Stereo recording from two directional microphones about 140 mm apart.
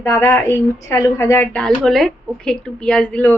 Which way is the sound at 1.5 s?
Centre (ahead or behind).